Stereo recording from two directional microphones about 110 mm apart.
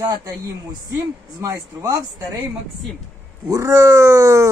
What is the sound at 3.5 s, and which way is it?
Speech, 25° right (ahead or behind).